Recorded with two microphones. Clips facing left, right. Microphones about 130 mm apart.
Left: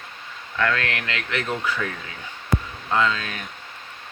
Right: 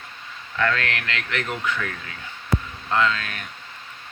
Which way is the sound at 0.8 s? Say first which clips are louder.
Even; 20° left (ahead or behind).